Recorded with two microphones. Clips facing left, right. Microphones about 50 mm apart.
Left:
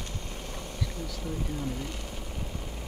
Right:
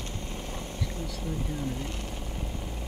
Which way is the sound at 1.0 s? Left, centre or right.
Centre.